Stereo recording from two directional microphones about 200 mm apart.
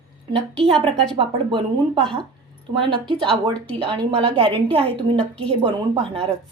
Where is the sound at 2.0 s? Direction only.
5° left (ahead or behind).